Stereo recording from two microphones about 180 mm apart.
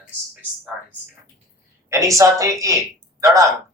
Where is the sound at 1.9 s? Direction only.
15° right (ahead or behind).